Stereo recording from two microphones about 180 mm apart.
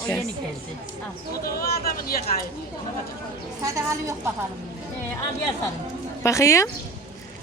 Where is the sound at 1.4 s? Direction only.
55° left (ahead or behind).